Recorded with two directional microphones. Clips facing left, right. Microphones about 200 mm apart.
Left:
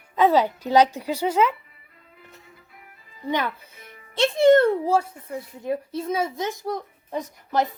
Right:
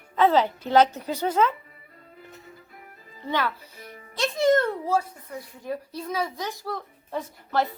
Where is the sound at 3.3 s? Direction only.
20° left (ahead or behind).